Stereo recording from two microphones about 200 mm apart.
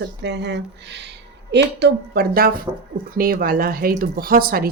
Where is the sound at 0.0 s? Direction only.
60° right (ahead or behind).